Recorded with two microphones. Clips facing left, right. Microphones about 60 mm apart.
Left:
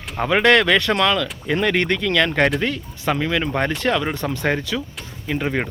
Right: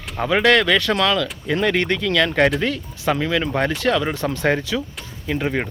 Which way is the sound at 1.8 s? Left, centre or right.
Left.